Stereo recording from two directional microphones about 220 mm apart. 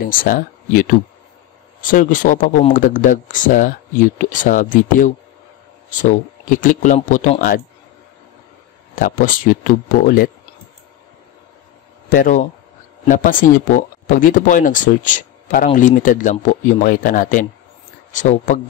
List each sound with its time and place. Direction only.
0.0 s speech: 40° left (ahead or behind)
8.9 s speech: 40° left (ahead or behind)
12.1 s speech: 35° left (ahead or behind)